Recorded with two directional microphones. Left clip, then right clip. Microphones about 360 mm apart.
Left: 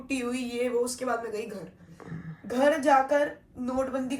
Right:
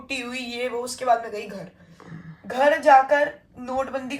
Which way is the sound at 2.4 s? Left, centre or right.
Right.